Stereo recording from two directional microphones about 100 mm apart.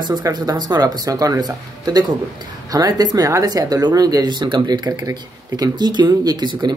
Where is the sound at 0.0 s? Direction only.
45° right (ahead or behind).